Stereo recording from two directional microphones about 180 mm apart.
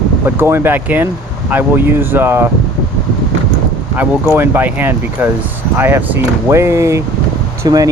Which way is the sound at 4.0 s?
10° right (ahead or behind).